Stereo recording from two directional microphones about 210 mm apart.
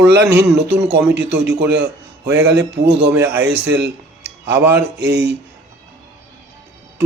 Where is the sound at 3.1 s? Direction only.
10° right (ahead or behind).